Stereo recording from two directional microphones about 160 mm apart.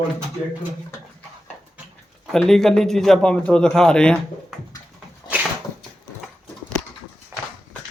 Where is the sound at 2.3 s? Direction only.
Centre (ahead or behind).